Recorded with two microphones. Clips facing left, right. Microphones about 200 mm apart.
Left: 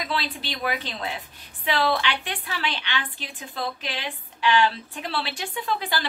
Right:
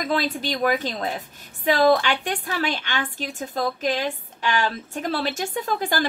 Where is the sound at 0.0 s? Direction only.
45° right (ahead or behind).